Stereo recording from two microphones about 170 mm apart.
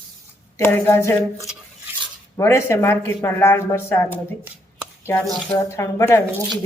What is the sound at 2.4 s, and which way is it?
Speech, 15° left (ahead or behind).